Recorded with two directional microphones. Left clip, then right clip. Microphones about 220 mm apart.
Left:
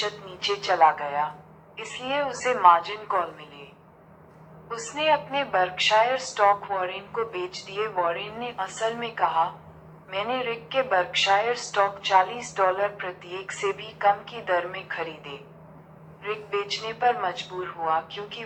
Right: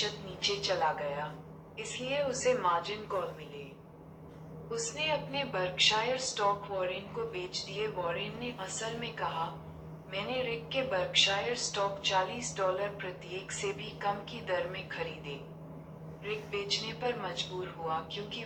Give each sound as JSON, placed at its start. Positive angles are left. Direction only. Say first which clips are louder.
{"t": 0.4, "sound": "a woman's voice", "louder": "left 10 dB", "side_deg": 20}
{"t": 4.8, "sound": "a woman's voice", "louder": "left 10 dB", "side_deg": 20}